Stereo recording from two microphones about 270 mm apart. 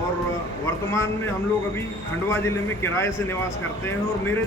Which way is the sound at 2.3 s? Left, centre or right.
Centre.